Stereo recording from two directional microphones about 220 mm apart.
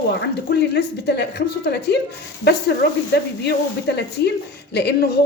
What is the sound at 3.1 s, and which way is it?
A woman's voice, 50° left (ahead or behind).